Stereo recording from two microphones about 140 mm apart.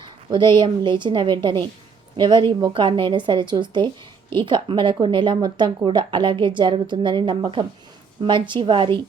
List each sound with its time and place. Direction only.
0.0 s speech: 30° right (ahead or behind)